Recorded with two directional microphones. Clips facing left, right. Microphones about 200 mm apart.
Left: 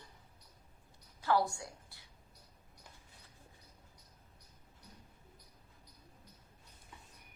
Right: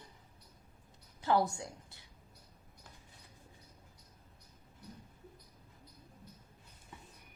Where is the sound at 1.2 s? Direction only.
20° right (ahead or behind).